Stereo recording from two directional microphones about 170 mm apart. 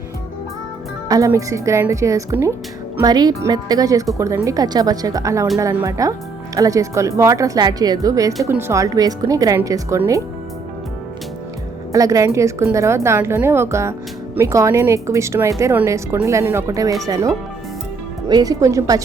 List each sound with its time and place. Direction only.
1.0 s speech: 20° right (ahead or behind)
11.9 s speech: 20° right (ahead or behind)